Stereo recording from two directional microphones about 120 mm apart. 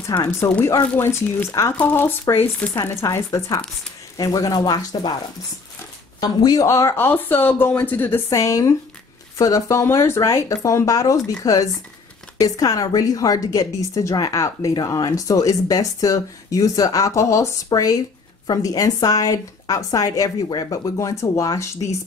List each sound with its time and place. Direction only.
0.0 s a woman's voice: 25° left (ahead or behind)
0.8 s a woman's voice: 15° left (ahead or behind); by 5.1 s 35° left (ahead or behind)
6.2 s a woman's voice: 30° left (ahead or behind)
17.7 s speech: 45° left (ahead or behind)
18.5 s a woman's voice: 30° left (ahead or behind)